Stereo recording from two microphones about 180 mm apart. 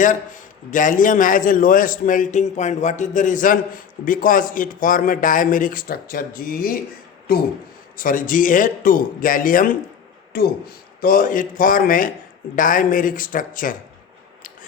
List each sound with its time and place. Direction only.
0.7 s a man's voice: 45° left (ahead or behind)